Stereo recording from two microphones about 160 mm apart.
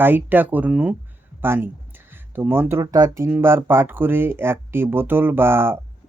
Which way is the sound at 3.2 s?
15° right (ahead or behind).